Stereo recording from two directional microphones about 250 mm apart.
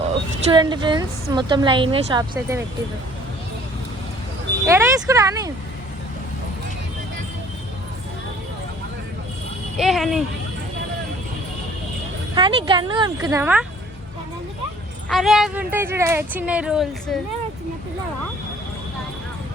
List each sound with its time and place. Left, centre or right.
0.5 s a woman's voice: centre
4.6 s a woman's voice: centre
9.7 s speech: centre
12.3 s a woman's voice: centre
15.1 s speech: centre